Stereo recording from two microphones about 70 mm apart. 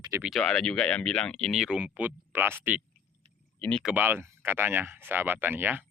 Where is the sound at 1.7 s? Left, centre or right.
Right.